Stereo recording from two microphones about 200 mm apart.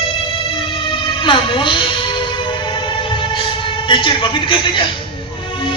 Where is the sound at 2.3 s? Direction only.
25° left (ahead or behind).